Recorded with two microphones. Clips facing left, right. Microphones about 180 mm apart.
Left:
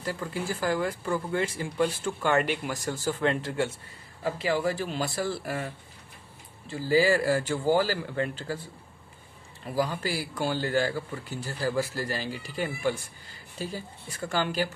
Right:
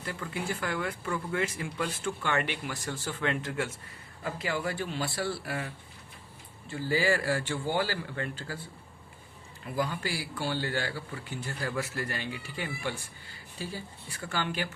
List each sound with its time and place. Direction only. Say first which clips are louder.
0.0 s speech: left 3 dB; 35° left (ahead or behind)
6.8 s speech: left 5 dB; 40° left (ahead or behind)
9.7 s speech: left 4 dB; 40° left (ahead or behind)